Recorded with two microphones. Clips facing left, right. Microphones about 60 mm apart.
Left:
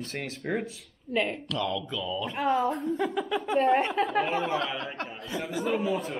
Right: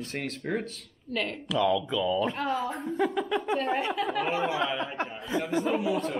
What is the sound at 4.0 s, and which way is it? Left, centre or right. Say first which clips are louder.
Speech: left 2 dB; left.